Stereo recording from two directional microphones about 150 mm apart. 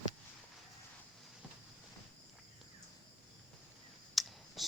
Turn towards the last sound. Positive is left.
turn(degrees=0)  # may be behind; listen again after turning